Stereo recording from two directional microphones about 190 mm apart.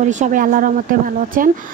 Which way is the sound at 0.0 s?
40° right (ahead or behind).